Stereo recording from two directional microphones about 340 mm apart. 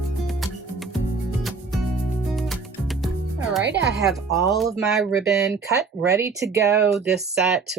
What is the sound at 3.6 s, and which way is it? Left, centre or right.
Speech, right.